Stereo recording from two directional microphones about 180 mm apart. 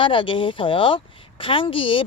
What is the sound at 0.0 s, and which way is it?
Speech, 30° left (ahead or behind).